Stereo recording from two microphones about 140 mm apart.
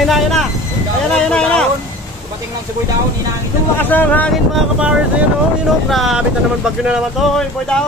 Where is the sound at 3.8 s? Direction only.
15° left (ahead or behind).